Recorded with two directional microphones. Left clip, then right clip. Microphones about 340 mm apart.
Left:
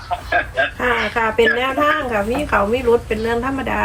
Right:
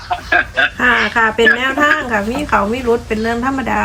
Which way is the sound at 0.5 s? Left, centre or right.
Right.